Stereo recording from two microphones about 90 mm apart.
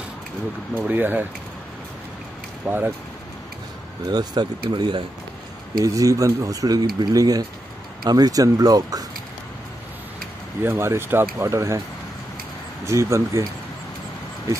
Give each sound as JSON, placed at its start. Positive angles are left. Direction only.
{"t": 0.7, "sound": "speech", "side_deg": -20}
{"t": 2.6, "sound": "speech", "side_deg": -20}
{"t": 4.1, "sound": "speech", "side_deg": -50}
{"t": 5.9, "sound": "speech", "side_deg": -40}
{"t": 10.6, "sound": "speech", "side_deg": -25}
{"t": 12.8, "sound": "speech", "side_deg": -35}